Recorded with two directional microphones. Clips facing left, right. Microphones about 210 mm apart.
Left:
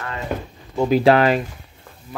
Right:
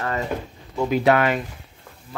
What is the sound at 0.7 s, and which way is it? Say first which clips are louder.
Speech: left 4 dB; 30° left (ahead or behind).